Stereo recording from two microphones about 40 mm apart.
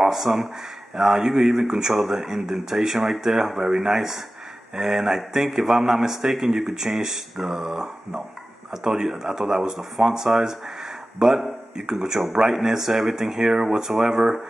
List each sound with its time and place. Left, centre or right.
0.0 s a man's voice: centre
3.5 s a man's voice: centre